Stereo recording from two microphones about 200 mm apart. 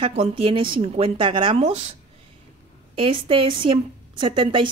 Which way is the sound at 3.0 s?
25° right (ahead or behind).